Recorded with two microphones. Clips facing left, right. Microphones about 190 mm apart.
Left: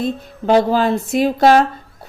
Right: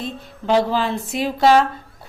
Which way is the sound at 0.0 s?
45° left (ahead or behind).